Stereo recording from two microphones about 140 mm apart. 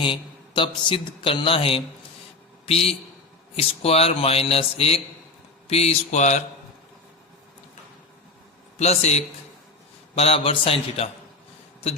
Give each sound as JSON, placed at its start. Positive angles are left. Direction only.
{"t": 0.0, "sound": "a man's voice", "side_deg": 35}
{"t": 8.8, "sound": "speech", "side_deg": 50}